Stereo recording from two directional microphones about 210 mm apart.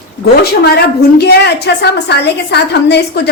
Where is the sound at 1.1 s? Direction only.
50° left (ahead or behind).